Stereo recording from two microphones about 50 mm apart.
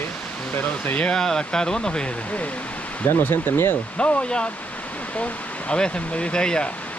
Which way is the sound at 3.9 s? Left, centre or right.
Left.